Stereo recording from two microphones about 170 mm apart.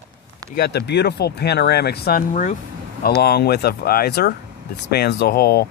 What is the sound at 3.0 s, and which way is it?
Speech, 70° left (ahead or behind).